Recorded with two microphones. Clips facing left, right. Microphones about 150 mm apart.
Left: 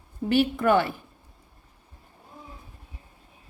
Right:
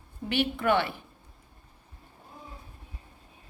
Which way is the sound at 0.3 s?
45° left (ahead or behind).